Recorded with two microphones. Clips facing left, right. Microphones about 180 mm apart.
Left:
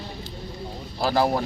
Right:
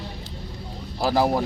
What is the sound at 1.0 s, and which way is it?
Speech, 10° right (ahead or behind).